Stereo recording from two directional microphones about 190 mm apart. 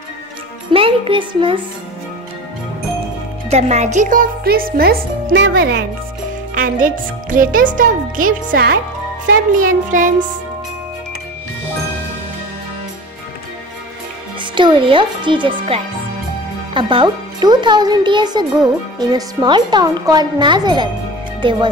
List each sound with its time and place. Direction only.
0.7 s speech: 30° right (ahead or behind)
3.4 s speech: 35° right (ahead or behind); by 5.9 s 60° right (ahead or behind)
6.5 s speech: 45° right (ahead or behind)
14.4 s a child's voice: 25° right (ahead or behind)